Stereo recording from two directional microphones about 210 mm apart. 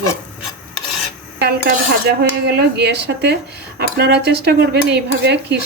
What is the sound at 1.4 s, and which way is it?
Speech, 50° right (ahead or behind).